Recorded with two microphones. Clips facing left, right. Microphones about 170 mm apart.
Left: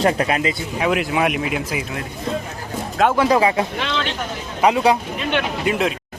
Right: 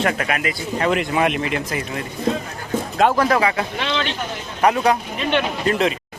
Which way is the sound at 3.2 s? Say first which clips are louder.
Left 2 dB; 20° left (ahead or behind).